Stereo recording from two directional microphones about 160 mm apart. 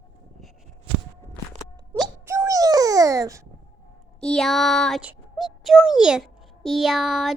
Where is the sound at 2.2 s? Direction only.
20° right (ahead or behind).